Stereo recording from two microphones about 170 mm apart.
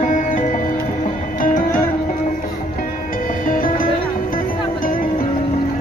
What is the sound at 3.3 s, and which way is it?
Music, 50° left (ahead or behind).